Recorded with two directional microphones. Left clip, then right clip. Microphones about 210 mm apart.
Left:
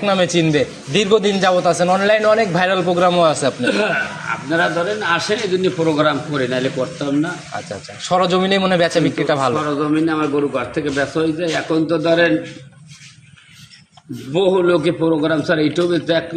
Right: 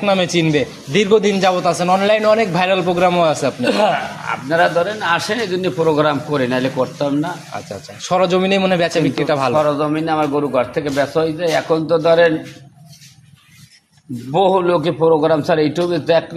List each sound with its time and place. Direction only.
0.0 s a man's voice: 15° right (ahead or behind)
3.6 s a man's voice: 55° right (ahead or behind)
8.1 s a man's voice: 10° right (ahead or behind)
9.8 s a man's voice: 50° right (ahead or behind)
14.3 s a man's voice: 55° right (ahead or behind)